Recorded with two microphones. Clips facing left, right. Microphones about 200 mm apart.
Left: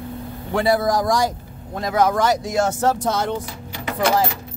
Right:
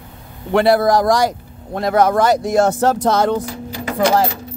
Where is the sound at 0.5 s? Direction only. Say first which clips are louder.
Right 5 dB; 70° right (ahead or behind).